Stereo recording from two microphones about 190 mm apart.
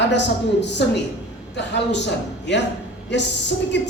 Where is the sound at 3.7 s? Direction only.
65° left (ahead or behind).